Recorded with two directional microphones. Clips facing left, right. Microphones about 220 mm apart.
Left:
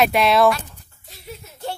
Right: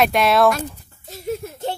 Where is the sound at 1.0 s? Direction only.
45° right (ahead or behind).